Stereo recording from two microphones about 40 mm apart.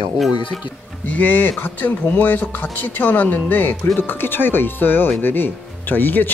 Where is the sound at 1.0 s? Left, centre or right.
Left.